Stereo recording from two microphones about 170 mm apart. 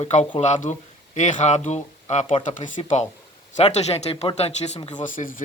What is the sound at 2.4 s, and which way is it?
Speech, 50° left (ahead or behind).